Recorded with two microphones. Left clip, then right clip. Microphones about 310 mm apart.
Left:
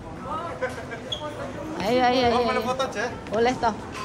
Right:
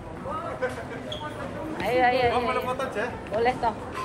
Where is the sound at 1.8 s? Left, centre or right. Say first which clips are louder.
Left 1 dB; left.